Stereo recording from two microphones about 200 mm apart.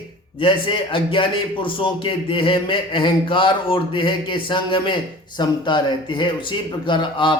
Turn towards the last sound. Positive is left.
turn(degrees=25)  # may be behind; listen again after turning